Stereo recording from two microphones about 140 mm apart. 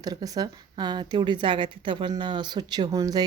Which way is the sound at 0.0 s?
25° right (ahead or behind).